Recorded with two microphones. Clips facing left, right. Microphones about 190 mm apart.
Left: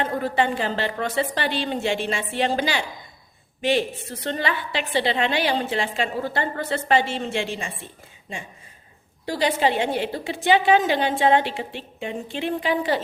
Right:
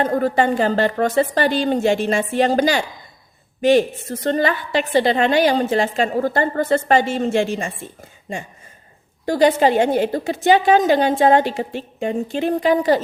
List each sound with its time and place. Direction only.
0.0 s a woman's voice: 45° right (ahead or behind)
9.2 s a woman's voice: 45° right (ahead or behind)